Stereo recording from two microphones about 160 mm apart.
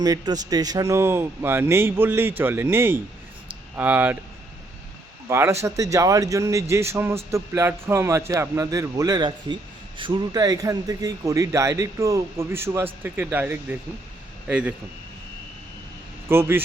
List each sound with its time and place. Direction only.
0.0 s a man's voice: 25° right (ahead or behind)
5.3 s a man's voice: 15° right (ahead or behind)
16.3 s a man's voice: 15° right (ahead or behind)